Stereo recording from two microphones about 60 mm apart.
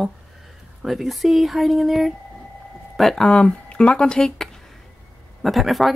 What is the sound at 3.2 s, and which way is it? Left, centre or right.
Speech, centre.